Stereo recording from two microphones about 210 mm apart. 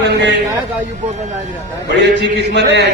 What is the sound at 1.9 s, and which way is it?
A man's voice, 55° right (ahead or behind).